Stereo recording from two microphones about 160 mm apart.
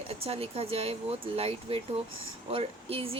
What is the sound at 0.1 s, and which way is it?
Speech, 40° right (ahead or behind).